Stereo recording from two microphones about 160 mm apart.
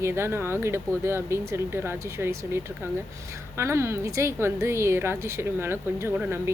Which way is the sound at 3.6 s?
15° right (ahead or behind).